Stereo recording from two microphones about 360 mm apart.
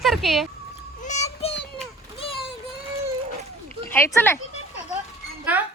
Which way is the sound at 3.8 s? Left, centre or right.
Centre.